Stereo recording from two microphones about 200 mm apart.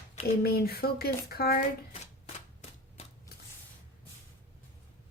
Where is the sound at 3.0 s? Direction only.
30° left (ahead or behind).